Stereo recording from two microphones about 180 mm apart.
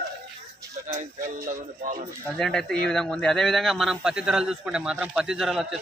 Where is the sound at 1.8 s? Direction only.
45° right (ahead or behind).